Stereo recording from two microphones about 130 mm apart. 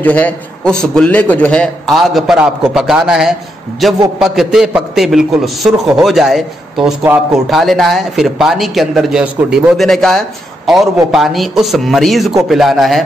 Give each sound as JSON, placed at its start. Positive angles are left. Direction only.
{"t": 0.0, "sound": "a man's voice", "side_deg": 10}